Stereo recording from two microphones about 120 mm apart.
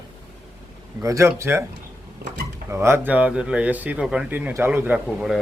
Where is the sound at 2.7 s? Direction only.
20° right (ahead or behind).